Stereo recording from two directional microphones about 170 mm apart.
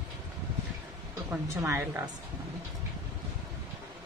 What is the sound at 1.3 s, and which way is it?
Speech, 15° right (ahead or behind).